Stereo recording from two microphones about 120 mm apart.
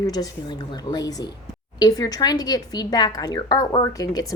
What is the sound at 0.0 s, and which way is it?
A woman's voice, 35° left (ahead or behind).